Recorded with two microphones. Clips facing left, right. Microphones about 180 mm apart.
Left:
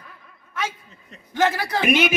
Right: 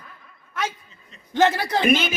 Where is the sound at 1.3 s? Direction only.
20° right (ahead or behind).